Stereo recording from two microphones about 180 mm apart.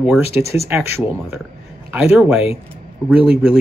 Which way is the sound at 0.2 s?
35° left (ahead or behind).